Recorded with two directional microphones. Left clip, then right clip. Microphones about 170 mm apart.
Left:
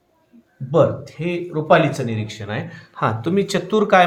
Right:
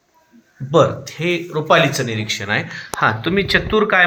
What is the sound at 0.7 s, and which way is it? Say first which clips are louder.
Speech: right 2 dB; 25° right (ahead or behind).